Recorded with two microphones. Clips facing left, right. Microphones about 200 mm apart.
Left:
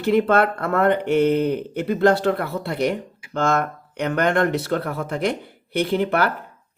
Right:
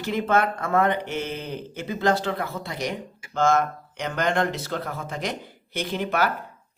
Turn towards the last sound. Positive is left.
turn(degrees=60)  # may be behind; listen again after turning